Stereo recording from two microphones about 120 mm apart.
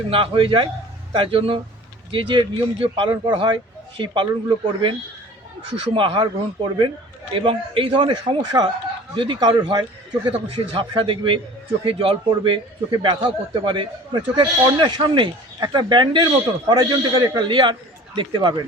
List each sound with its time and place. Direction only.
0.1 s speech: 50° right (ahead or behind)
7.3 s a man's voice: 45° right (ahead or behind)